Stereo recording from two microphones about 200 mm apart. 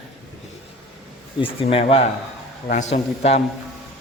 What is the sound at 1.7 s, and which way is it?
Speech, 30° left (ahead or behind).